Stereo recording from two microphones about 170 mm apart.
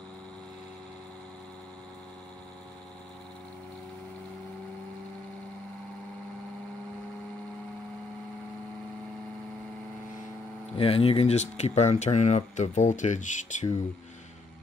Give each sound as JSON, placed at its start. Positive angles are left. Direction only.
{"t": 10.8, "sound": "speech", "side_deg": 35}